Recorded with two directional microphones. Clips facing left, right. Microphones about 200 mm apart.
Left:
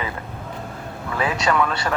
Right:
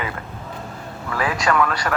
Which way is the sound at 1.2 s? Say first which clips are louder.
Right 1 dB; 20° left (ahead or behind).